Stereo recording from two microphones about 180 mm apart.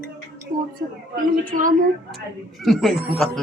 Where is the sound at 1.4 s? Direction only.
50° right (ahead or behind).